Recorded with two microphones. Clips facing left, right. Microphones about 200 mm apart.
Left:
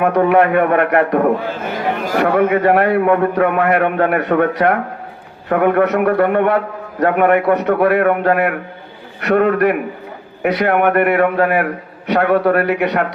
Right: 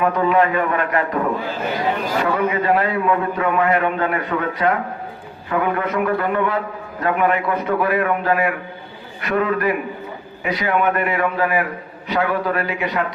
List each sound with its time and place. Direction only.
0.0 s a man's voice: 65° left (ahead or behind)